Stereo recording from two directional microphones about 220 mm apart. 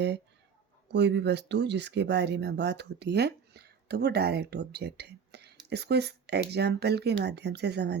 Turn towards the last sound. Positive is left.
turn(degrees=-50)  # may be behind; listen again after turning